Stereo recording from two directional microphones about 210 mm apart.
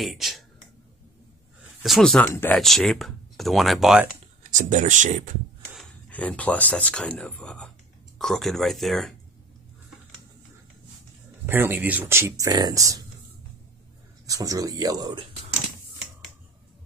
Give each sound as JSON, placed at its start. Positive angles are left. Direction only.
{"t": 0.0, "sound": "speech", "side_deg": 0}
{"t": 1.8, "sound": "speech", "side_deg": 0}
{"t": 4.4, "sound": "speech", "side_deg": -35}
{"t": 5.8, "sound": "speech", "side_deg": 5}
{"t": 11.4, "sound": "speech", "side_deg": -10}
{"t": 14.2, "sound": "speech", "side_deg": -15}